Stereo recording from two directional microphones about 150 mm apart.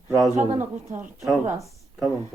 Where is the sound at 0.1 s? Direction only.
20° right (ahead or behind).